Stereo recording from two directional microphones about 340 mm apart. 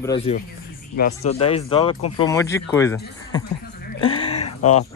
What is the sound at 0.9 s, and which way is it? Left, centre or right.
Speech, left.